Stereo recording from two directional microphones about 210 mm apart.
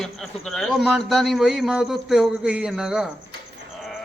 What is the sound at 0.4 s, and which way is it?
Speech, centre (ahead or behind).